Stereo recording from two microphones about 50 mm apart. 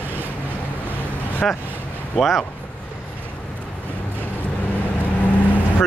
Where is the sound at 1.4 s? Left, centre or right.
Centre.